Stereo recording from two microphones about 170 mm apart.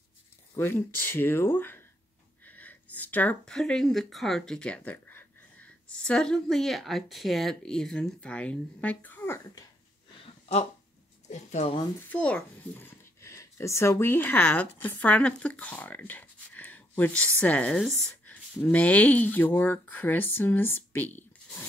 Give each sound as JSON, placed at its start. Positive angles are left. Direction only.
{"t": 0.6, "sound": "speech", "side_deg": 10}
{"t": 10.2, "sound": "a sound", "side_deg": 40}
{"t": 11.2, "sound": "speech", "side_deg": 45}
{"t": 12.1, "sound": "a child's voice", "side_deg": 5}